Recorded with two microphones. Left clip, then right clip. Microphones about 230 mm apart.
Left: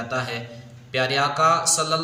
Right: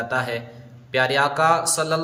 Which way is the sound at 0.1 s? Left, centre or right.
Right.